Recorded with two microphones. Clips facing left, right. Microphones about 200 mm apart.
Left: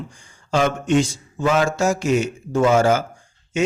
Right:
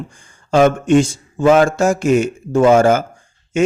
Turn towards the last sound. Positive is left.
turn(degrees=-50)  # may be behind; listen again after turning